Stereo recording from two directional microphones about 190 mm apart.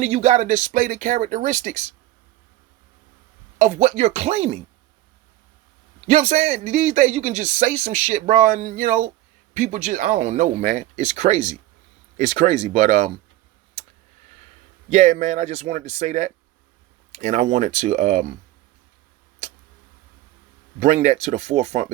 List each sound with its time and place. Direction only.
0.0 s speech: 35° right (ahead or behind)
3.6 s speech: 35° right (ahead or behind)
6.1 s speech: 35° right (ahead or behind)
14.8 s speech: 40° right (ahead or behind)
20.7 s speech: 35° right (ahead or behind)